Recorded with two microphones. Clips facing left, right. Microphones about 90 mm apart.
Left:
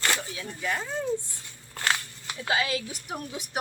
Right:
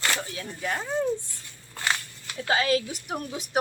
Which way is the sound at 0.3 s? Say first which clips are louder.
Even; 35° right (ahead or behind).